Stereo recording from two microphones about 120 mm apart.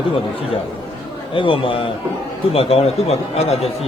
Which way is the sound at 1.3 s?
45° left (ahead or behind).